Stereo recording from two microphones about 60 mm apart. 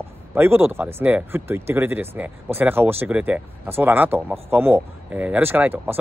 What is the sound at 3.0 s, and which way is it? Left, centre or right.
Speech, right.